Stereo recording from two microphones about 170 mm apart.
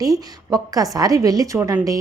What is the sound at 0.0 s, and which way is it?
A woman's voice, 20° right (ahead or behind).